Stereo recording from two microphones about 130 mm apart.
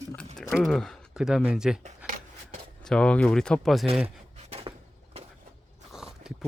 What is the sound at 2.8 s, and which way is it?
Speech, 5° left (ahead or behind).